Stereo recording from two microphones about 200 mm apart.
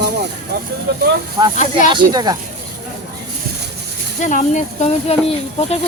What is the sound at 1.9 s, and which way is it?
Speech, 20° right (ahead or behind).